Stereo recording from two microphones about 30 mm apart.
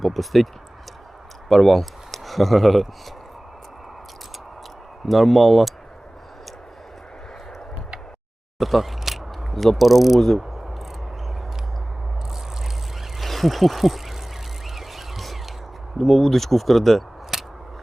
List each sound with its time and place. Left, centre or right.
0.0 s speech: centre
1.5 s speech: centre
5.0 s speech: centre
8.5 s speech: centre
13.1 s speech: centre
14.8 s music: centre
16.0 s speech: centre
17.3 s scissors: centre